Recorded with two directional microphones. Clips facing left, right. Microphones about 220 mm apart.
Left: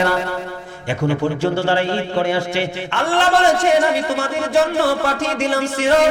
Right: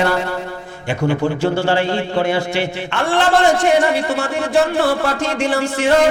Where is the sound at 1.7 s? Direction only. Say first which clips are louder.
Right 1 dB; 15° right (ahead or behind).